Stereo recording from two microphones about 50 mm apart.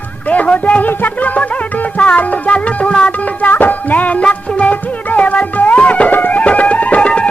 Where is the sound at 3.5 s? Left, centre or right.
Left.